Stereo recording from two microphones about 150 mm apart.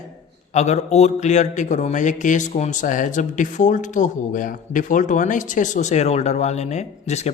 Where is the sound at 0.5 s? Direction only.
50° left (ahead or behind).